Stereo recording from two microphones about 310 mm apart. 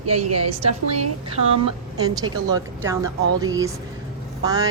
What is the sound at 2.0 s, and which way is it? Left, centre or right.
Speech, centre.